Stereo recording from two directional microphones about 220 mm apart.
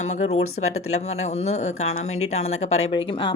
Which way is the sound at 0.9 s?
30° left (ahead or behind).